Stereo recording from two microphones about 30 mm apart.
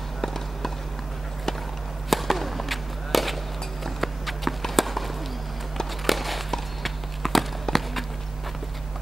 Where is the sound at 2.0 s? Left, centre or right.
Centre.